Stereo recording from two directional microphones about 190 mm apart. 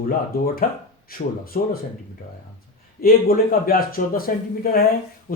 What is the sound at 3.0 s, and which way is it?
Speech, 50° left (ahead or behind).